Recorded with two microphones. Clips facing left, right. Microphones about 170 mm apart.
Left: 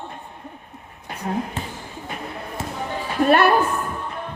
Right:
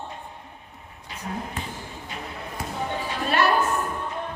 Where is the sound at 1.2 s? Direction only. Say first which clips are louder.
Left 7 dB; 60° left (ahead or behind).